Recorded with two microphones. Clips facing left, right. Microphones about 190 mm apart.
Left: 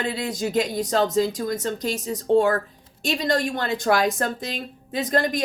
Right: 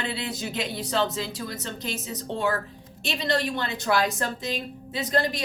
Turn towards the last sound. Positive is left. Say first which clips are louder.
# left 3 dB
turn(degrees=45)  # may be behind; listen again after turning